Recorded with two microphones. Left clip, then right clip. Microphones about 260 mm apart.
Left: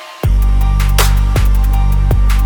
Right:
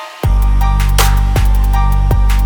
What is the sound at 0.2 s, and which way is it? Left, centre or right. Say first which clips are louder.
Music: right 3 dB; centre.